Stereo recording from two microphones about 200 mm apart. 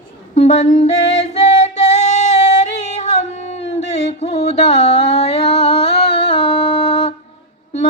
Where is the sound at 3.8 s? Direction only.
35° left (ahead or behind).